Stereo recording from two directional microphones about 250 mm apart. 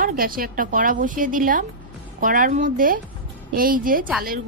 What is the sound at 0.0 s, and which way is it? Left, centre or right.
A woman's voice, right.